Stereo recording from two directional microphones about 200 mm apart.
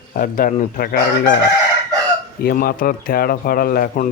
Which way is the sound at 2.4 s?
45° left (ahead or behind).